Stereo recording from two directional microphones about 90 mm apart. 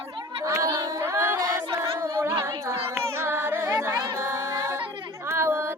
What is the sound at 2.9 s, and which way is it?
Music, 25° right (ahead or behind).